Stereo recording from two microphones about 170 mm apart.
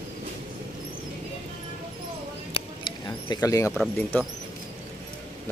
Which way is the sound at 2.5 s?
30° left (ahead or behind).